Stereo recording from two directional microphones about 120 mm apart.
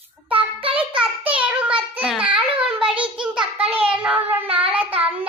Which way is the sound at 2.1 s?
10° right (ahead or behind).